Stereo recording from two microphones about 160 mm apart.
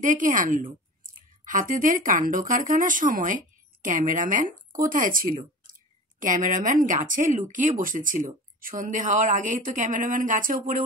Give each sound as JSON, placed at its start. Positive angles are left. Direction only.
{"t": 0.0, "sound": "a woman's voice", "side_deg": -55}